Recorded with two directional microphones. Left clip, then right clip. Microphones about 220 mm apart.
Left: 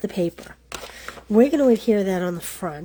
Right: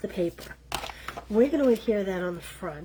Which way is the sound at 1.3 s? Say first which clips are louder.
Left 6 dB; 40° left (ahead or behind).